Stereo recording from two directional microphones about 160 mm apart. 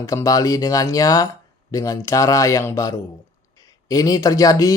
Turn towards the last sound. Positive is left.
turn(degrees=20)  # may be behind; listen again after turning